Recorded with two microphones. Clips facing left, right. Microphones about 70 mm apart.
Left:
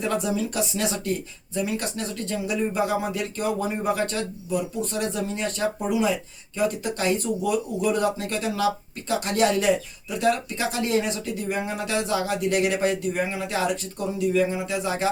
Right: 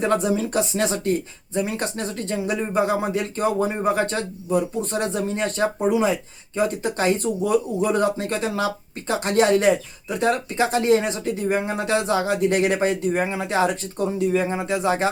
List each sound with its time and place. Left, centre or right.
0.0 s speech: right